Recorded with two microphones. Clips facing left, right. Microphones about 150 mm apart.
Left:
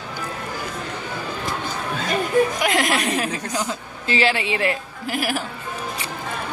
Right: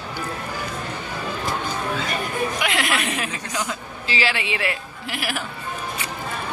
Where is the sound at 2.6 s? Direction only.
40° left (ahead or behind).